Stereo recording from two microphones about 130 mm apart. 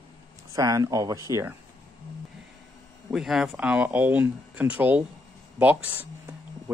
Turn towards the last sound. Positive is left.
turn(degrees=-15)  # may be behind; listen again after turning